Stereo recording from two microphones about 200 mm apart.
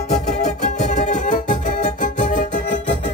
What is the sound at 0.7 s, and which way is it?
Music, 35° left (ahead or behind).